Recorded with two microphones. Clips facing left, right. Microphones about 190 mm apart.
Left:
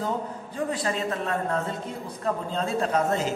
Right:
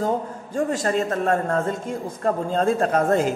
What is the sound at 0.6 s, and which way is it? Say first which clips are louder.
A man's voice: right 6 dB; 45° right (ahead or behind).